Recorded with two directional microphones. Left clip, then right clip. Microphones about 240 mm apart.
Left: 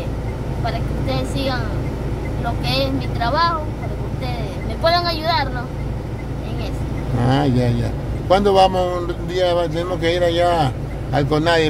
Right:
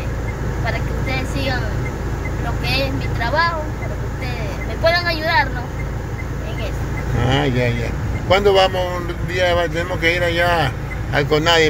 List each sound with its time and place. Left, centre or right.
1.1 s vehicle: left
2.6 s speech: left
4.8 s speech: left
7.2 s a man's voice: centre